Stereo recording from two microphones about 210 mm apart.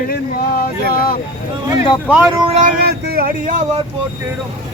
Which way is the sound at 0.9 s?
45° left (ahead or behind).